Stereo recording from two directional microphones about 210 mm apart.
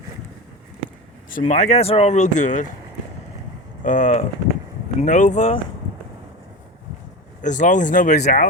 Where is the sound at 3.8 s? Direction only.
35° left (ahead or behind).